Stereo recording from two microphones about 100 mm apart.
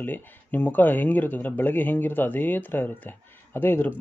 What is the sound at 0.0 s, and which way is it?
A man's voice, 20° left (ahead or behind).